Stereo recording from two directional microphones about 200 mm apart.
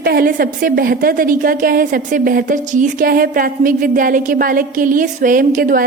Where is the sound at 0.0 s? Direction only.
50° right (ahead or behind).